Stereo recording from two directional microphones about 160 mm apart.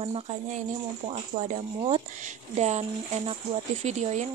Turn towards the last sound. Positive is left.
turn(degrees=-45)  # may be behind; listen again after turning